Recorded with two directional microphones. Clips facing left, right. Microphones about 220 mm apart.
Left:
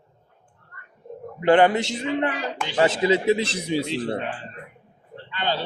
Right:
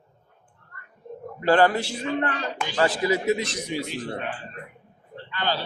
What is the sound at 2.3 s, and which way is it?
Speech, 5° left (ahead or behind).